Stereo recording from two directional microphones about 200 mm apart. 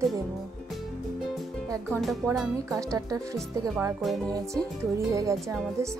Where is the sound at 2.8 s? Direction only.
15° right (ahead or behind).